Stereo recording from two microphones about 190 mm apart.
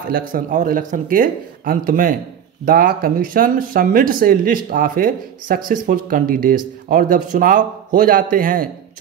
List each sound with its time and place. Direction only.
0.1 s speech: 50° right (ahead or behind)